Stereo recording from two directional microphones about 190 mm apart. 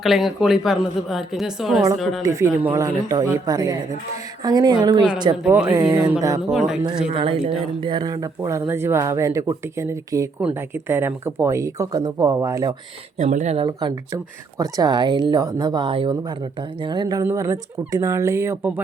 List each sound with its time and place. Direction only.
0.0 s a woman's voice: centre (ahead or behind)
2.2 s speech: 15° right (ahead or behind)
6.5 s a woman's voice: centre (ahead or behind)
7.1 s speech: 30° right (ahead or behind)
13.1 s speech: 40° right (ahead or behind)
13.7 s speech: 20° right (ahead or behind)